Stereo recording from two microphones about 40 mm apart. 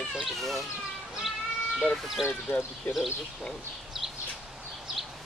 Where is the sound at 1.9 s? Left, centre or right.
Centre.